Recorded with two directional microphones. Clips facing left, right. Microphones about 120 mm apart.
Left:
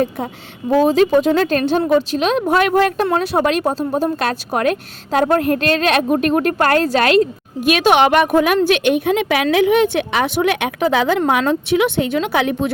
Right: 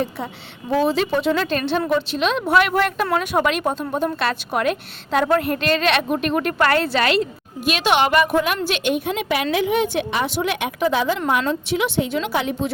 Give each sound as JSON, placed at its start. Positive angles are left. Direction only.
{"t": 0.8, "sound": "a woman's voice", "side_deg": 45}